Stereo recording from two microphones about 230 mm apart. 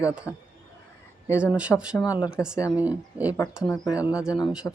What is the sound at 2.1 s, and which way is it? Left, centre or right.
Speech, centre.